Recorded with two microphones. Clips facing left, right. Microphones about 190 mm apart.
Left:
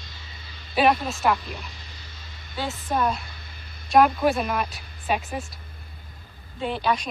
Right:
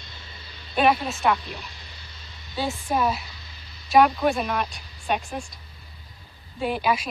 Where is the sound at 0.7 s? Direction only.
Centre (ahead or behind).